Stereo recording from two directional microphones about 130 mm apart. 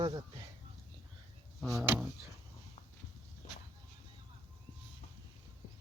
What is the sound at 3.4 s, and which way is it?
Vehicle, 65° left (ahead or behind).